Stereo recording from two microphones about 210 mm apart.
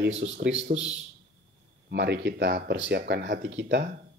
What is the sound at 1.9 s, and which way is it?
Speech, 50° right (ahead or behind).